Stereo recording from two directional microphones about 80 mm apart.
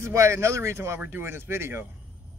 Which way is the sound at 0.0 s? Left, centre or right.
Right.